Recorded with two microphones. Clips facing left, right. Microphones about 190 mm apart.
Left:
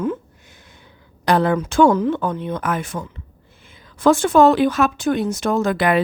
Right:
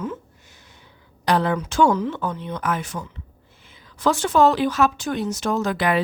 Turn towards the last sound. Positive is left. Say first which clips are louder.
# left 4 dB
turn(degrees=55)  # may be behind; listen again after turning